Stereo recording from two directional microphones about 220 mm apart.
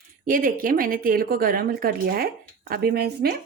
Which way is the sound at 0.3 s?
40° right (ahead or behind).